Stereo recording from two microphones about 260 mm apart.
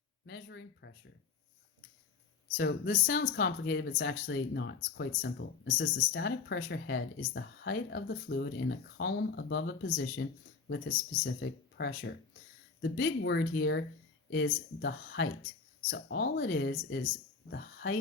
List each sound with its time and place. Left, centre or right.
0.3 s speech: left
2.6 s speech: left
11.3 s speech: left